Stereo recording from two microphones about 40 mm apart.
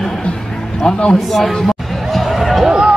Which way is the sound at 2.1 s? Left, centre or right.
Centre.